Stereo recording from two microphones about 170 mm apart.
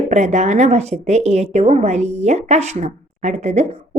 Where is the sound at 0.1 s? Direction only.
40° right (ahead or behind).